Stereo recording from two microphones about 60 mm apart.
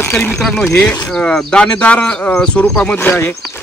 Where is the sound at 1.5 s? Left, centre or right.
Centre.